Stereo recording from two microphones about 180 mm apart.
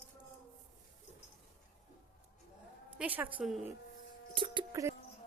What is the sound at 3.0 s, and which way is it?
Speech, 10° right (ahead or behind).